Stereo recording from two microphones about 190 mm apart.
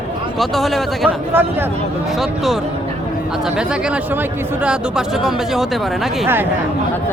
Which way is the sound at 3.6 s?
5° right (ahead or behind).